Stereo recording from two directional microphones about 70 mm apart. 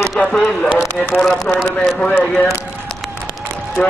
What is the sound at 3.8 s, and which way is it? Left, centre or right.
Speech, left.